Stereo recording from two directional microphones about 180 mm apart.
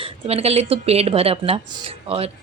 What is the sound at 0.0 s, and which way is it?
Speech, 35° right (ahead or behind).